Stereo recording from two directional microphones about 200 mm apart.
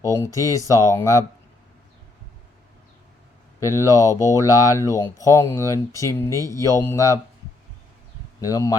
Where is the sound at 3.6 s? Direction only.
15° left (ahead or behind).